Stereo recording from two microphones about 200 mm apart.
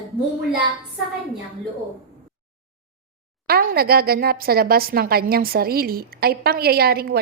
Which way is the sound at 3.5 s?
50° right (ahead or behind).